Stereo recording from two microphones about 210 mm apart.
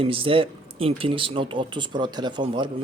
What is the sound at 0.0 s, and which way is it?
Speech, 25° right (ahead or behind).